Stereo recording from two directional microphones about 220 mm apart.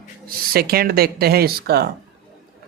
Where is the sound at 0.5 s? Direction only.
45° right (ahead or behind).